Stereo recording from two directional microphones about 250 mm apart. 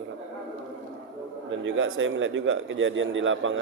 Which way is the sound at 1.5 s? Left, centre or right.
Right.